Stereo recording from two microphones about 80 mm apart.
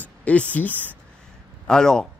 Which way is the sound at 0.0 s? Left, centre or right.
Centre.